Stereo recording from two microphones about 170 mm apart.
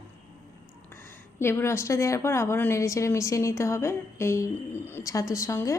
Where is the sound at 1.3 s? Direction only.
15° left (ahead or behind).